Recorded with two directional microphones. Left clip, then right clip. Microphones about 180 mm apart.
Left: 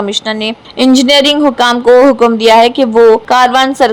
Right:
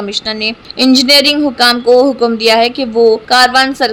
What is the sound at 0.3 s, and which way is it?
Speech, 15° left (ahead or behind).